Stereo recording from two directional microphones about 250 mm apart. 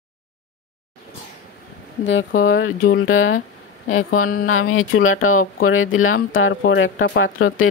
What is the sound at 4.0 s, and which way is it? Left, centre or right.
Speech, left.